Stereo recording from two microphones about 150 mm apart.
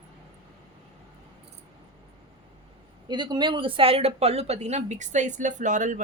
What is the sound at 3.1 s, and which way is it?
Speech, 30° right (ahead or behind).